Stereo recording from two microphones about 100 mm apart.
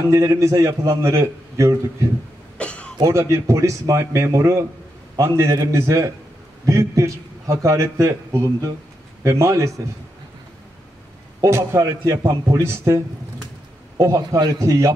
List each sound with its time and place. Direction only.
0.0 s a man's voice: 30° right (ahead or behind)
2.5 s cough: 10° left (ahead or behind)
3.0 s a man's voice: 30° right (ahead or behind)
11.4 s a man's voice: 30° right (ahead or behind)